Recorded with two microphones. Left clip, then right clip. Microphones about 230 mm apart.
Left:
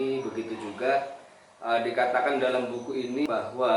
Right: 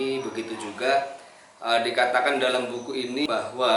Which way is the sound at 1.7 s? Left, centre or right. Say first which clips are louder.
Right 3 dB; centre.